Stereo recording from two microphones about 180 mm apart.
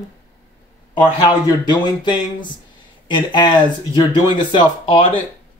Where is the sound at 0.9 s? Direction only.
25° left (ahead or behind).